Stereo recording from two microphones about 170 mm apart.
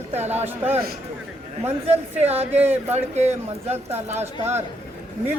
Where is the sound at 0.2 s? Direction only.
40° right (ahead or behind).